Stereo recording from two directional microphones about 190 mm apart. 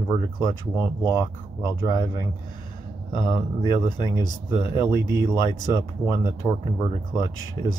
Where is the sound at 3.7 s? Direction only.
25° left (ahead or behind).